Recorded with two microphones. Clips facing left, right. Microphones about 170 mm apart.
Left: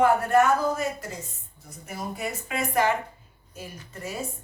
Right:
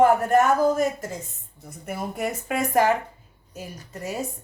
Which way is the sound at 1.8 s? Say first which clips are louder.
Right 4 dB; 55° right (ahead or behind).